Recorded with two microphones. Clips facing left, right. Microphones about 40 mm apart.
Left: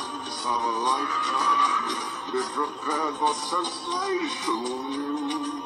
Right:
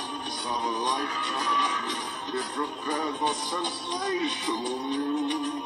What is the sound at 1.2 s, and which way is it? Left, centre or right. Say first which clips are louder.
Music: left 4 dB; centre.